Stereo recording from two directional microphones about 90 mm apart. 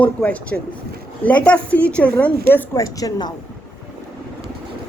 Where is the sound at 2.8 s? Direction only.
40° left (ahead or behind).